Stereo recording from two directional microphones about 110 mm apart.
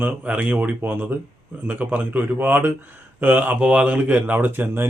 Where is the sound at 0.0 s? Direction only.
15° right (ahead or behind).